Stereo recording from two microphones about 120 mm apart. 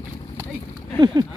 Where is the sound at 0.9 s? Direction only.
40° right (ahead or behind).